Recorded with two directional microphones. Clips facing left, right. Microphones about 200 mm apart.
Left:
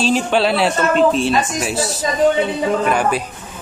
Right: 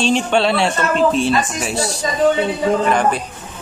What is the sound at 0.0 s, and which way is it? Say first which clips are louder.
A man's voice: even; 5° left (ahead or behind).